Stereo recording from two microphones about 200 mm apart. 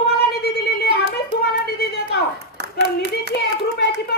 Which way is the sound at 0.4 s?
55° left (ahead or behind).